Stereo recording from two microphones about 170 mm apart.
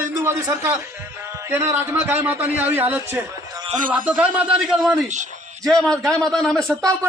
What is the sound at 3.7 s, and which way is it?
Speech, 50° right (ahead or behind).